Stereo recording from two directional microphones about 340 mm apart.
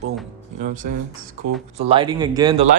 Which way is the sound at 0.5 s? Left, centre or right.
Right.